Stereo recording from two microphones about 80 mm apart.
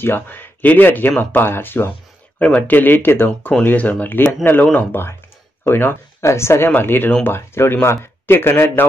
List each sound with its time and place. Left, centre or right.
0.0 s speech: left